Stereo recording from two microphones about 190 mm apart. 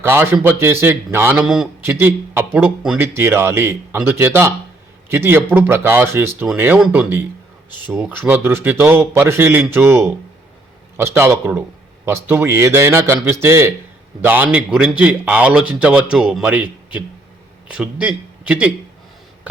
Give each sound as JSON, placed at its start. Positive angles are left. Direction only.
{"t": 0.0, "sound": "a man's voice", "side_deg": -10}